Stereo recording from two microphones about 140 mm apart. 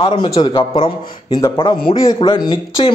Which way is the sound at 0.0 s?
35° left (ahead or behind).